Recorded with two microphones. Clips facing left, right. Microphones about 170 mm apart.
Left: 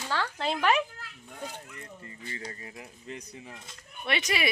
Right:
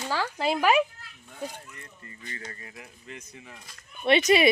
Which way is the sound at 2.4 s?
30° left (ahead or behind).